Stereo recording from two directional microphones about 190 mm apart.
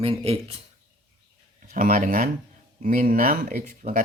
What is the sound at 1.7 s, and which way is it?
Speech, 45° right (ahead or behind).